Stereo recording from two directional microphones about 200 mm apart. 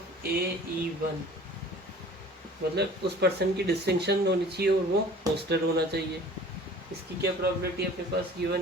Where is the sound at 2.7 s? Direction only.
55° right (ahead or behind).